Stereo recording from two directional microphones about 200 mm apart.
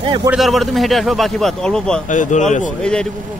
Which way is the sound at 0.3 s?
Centre (ahead or behind).